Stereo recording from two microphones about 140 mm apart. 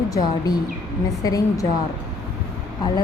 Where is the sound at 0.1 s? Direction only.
25° left (ahead or behind).